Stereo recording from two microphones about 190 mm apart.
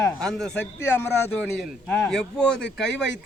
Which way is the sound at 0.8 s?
15° left (ahead or behind).